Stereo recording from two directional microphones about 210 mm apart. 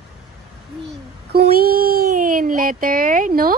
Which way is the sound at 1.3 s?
45° right (ahead or behind).